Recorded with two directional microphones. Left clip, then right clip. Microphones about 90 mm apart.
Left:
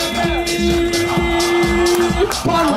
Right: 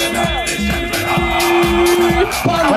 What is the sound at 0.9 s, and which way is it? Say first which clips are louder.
Music: right 1 dB; 30° right (ahead or behind).